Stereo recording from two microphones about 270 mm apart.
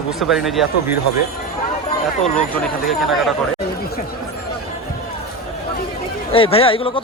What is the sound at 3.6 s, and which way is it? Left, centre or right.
Chatter, left.